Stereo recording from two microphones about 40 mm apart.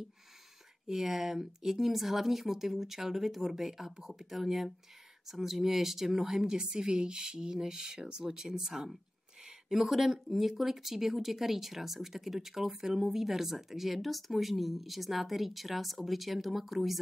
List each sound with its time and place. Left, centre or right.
0.8 s speech: centre
9.8 s speech: centre